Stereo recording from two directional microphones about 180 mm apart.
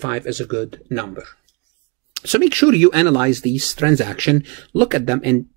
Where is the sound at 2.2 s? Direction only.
35° right (ahead or behind).